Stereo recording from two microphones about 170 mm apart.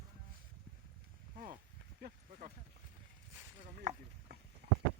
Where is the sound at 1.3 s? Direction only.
50° right (ahead or behind).